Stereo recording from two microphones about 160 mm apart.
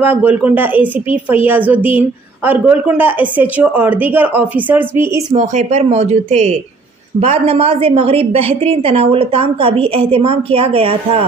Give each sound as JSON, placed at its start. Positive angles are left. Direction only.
{"t": 0.0, "sound": "a woman's voice", "side_deg": -10}
{"t": 5.3, "sound": "a woman's voice", "side_deg": -45}